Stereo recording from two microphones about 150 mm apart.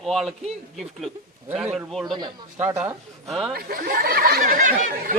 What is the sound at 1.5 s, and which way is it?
Speech, 15° right (ahead or behind).